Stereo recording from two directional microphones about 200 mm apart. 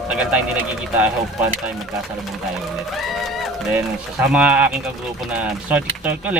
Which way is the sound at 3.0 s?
Centre (ahead or behind).